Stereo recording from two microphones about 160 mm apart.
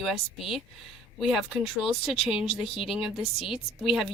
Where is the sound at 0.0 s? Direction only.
Centre (ahead or behind).